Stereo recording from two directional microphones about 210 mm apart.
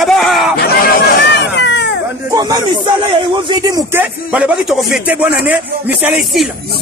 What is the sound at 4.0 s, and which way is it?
Speech, 5° right (ahead or behind).